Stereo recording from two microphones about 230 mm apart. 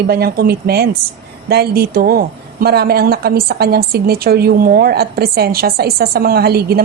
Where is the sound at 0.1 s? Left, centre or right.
Right.